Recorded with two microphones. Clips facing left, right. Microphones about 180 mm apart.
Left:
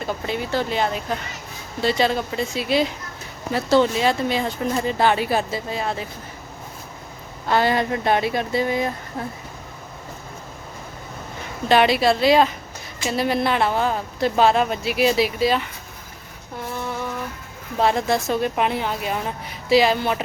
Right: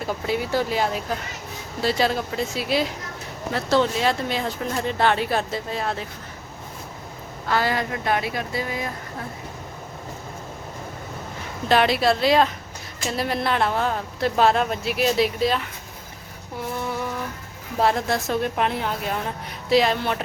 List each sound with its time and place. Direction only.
0.0 s a woman's voice: 5° right (ahead or behind)
7.4 s speech: 25° left (ahead or behind)
11.7 s a woman's voice: centre (ahead or behind)
17.7 s a woman's voice: centre (ahead or behind)